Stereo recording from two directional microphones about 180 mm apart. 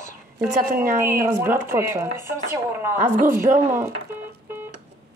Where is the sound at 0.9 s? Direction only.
15° right (ahead or behind).